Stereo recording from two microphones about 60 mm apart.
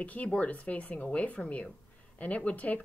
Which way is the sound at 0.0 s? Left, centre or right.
Left.